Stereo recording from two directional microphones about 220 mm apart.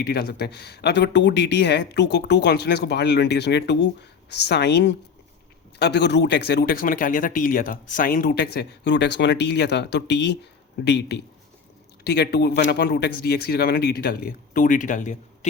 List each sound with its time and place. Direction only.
0.0 s speech: 45° left (ahead or behind)